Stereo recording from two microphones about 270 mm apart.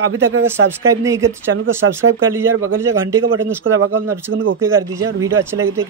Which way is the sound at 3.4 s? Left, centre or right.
Right.